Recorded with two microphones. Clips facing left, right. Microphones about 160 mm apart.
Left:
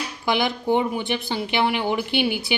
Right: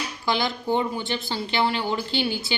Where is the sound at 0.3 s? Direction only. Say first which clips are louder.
Left 3 dB; 15° left (ahead or behind).